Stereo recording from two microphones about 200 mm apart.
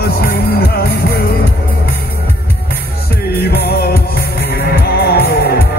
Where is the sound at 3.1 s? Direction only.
50° left (ahead or behind).